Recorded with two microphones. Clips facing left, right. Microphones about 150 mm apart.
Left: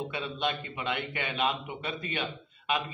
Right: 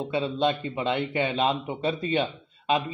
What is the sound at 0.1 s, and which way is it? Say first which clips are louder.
A man's voice: right 8 dB; 25° right (ahead or behind).